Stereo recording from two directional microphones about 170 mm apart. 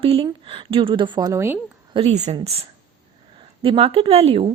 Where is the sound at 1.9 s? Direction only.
35° right (ahead or behind).